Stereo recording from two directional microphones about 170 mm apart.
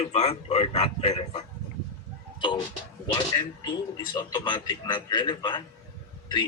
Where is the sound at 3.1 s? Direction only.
25° left (ahead or behind).